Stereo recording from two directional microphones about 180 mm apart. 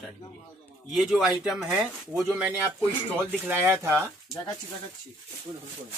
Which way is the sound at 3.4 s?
10° right (ahead or behind).